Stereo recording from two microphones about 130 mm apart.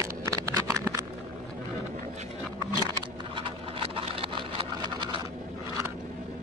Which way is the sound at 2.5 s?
35° right (ahead or behind).